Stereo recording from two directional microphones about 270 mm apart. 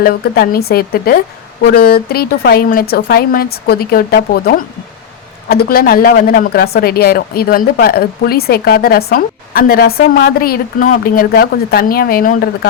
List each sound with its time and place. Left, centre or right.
0.0 s a woman's voice: left